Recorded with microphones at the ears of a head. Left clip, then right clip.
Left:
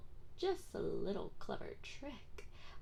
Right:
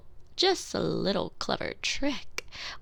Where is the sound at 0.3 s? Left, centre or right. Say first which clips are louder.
Right 14 dB; right.